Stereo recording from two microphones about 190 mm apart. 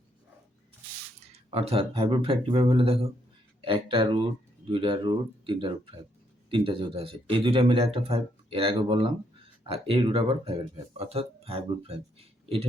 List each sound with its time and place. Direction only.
1.2 s speech: 30° right (ahead or behind)